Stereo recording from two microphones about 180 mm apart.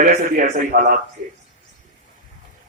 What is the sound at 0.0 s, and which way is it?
A man's voice, 50° right (ahead or behind).